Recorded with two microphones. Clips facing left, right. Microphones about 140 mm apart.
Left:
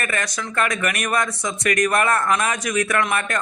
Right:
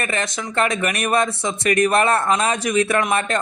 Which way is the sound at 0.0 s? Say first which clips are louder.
Right 2 dB; 25° right (ahead or behind).